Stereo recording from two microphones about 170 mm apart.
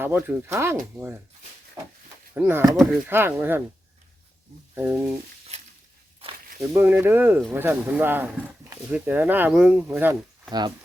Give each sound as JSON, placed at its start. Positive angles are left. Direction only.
{"t": 0.0, "sound": "speech", "side_deg": -15}
{"t": 4.7, "sound": "speech", "side_deg": -10}
{"t": 6.6, "sound": "speech", "side_deg": -15}